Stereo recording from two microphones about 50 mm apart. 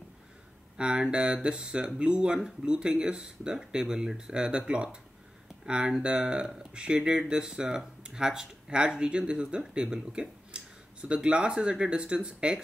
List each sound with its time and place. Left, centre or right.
0.7 s speech: centre